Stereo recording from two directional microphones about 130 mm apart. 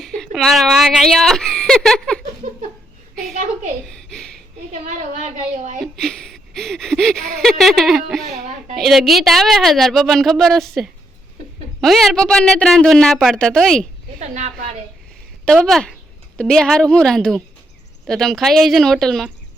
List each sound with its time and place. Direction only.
0.0 s speech: centre (ahead or behind)
3.8 s a child's voice: 5° left (ahead or behind)
4.7 s speech: 70° right (ahead or behind)
5.8 s speech: 5° left (ahead or behind)
14.2 s a woman's voice: 65° right (ahead or behind)
15.5 s speech: centre (ahead or behind)